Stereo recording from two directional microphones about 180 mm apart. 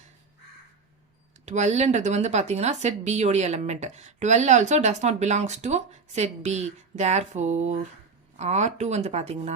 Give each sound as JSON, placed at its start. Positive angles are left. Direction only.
{"t": 1.5, "sound": "a woman's voice", "side_deg": -40}